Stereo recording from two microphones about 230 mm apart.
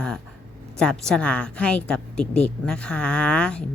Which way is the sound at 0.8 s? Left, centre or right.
Centre.